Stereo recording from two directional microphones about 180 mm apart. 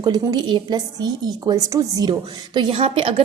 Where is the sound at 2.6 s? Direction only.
30° right (ahead or behind).